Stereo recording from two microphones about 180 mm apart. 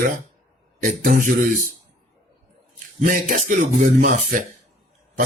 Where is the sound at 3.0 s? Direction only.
50° right (ahead or behind).